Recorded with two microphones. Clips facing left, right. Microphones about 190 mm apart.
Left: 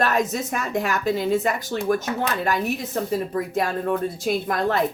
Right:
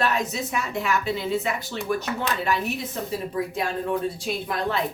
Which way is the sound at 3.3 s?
50° left (ahead or behind).